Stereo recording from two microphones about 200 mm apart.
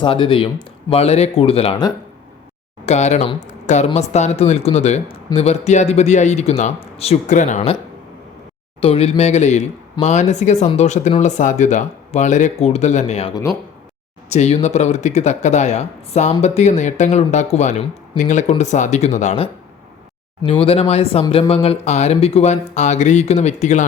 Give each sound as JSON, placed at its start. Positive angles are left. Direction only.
{"t": 0.0, "sound": "speech", "side_deg": 25}
{"t": 8.8, "sound": "speech", "side_deg": 30}